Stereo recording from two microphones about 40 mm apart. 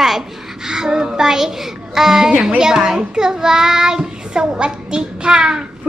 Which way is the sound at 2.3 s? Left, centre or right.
Centre.